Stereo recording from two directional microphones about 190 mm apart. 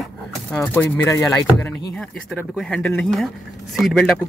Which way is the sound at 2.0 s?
Centre (ahead or behind).